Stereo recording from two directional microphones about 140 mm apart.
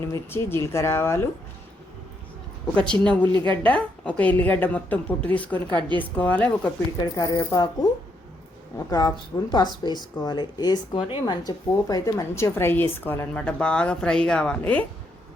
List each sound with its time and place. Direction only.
0.0 s speech: 15° left (ahead or behind)
2.7 s a woman's voice: 5° left (ahead or behind)
7.0 s speech: 30° left (ahead or behind)
8.9 s speech: 30° left (ahead or behind); by 14.8 s 10° left (ahead or behind)